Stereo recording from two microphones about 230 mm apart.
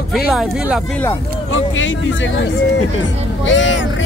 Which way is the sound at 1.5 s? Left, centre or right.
Left.